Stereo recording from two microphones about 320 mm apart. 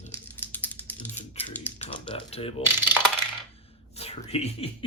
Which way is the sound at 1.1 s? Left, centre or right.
Centre.